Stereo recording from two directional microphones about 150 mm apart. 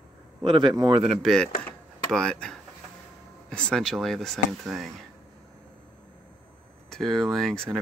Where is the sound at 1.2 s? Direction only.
5° left (ahead or behind).